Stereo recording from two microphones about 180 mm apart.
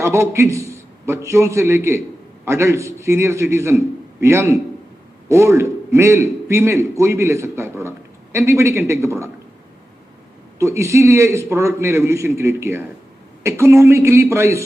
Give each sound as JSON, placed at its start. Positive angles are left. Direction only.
{"t": 0.0, "sound": "a man's voice", "side_deg": -15}
{"t": 10.6, "sound": "a man's voice", "side_deg": -15}